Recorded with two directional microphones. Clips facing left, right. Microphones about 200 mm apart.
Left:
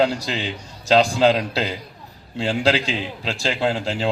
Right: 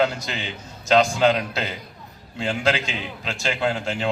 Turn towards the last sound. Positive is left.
turn(degrees=30)  # may be behind; listen again after turning